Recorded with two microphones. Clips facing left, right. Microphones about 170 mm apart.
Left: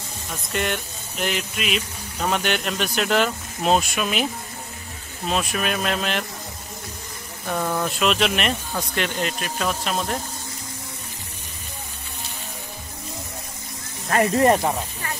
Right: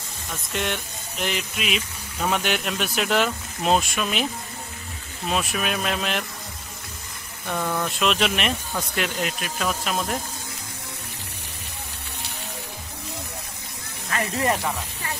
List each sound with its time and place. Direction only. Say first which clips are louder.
0.5 s speech: left 2 dB; centre (ahead or behind)
5.3 s speech: left 1 dB; centre (ahead or behind)
7.4 s speech: left 2 dB; 10° left (ahead or behind)
14.0 s speech: left 7 dB; 35° left (ahead or behind)